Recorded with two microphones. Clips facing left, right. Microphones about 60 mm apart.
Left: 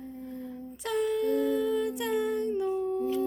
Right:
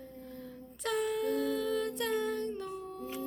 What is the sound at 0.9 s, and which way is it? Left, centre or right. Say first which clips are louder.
Music: left 4 dB; centre.